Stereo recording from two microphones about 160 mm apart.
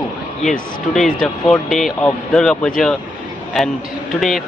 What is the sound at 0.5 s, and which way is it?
Speech, 5° left (ahead or behind).